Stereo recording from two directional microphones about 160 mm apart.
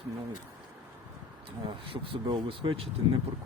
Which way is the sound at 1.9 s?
35° right (ahead or behind).